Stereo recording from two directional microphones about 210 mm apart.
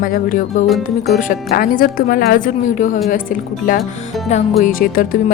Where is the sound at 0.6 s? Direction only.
Centre (ahead or behind).